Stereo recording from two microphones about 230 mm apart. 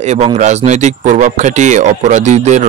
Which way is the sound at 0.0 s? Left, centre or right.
Right.